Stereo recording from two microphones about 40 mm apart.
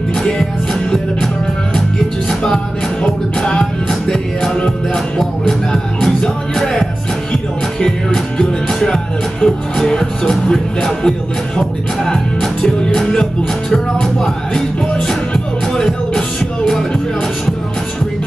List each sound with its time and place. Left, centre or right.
3.0 s music: left
6.0 s music: centre
7.8 s music: centre
12.6 s music: centre